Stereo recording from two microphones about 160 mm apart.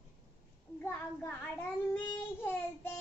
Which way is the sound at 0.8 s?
10° left (ahead or behind).